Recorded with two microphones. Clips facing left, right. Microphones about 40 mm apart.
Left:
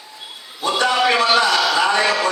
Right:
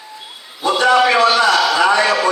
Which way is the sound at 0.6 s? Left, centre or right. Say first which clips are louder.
Right 5 dB; centre.